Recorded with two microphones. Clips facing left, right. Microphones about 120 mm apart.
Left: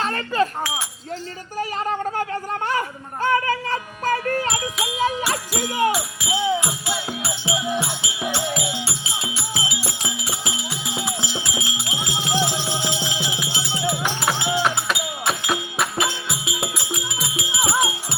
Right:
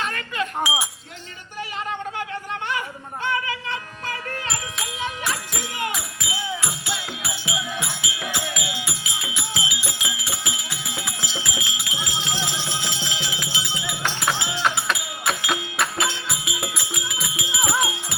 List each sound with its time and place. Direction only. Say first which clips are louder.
0.0 s wind chime: left 6 dB; 35° left (ahead or behind)
0.6 s speech: right 2 dB; 10° right (ahead or behind)
1.5 s a sound: left 5 dB; 40° left (ahead or behind)
5.5 s speech: left 8 dB; 40° left (ahead or behind)
6.2 s music: left 8 dB; 20° left (ahead or behind)
7.2 s music: left 4 dB; 30° left (ahead or behind)
11.9 s music: left 6 dB; 15° left (ahead or behind)
17.7 s music: left 2 dB; 25° left (ahead or behind)